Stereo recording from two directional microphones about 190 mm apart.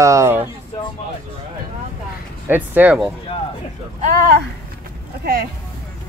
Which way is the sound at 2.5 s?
10° right (ahead or behind).